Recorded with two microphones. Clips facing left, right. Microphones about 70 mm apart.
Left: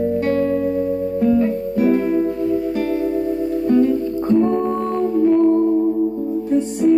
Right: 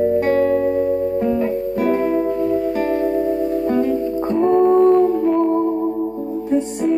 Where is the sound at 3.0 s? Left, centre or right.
Right; by 5.0 s centre.